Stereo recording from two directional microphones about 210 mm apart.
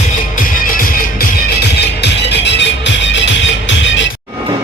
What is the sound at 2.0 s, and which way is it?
Music, 55° left (ahead or behind).